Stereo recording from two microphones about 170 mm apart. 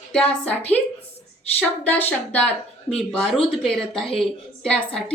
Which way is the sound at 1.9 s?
10° left (ahead or behind).